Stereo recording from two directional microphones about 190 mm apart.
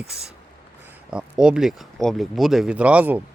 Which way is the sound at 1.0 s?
5° right (ahead or behind).